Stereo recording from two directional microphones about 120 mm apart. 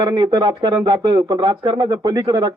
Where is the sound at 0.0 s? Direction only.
35° right (ahead or behind).